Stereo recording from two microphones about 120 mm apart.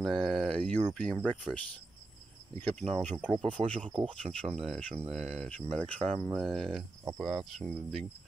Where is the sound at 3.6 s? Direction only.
45° right (ahead or behind).